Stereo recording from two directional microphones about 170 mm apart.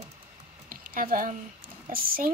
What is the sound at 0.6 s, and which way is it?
Typing, 55° right (ahead or behind).